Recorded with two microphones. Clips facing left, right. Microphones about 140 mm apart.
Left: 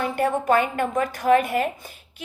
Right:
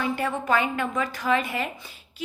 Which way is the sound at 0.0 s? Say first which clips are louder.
Left 4 dB; 50° left (ahead or behind).